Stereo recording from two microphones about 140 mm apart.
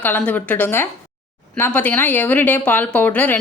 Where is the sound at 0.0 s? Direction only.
10° left (ahead or behind).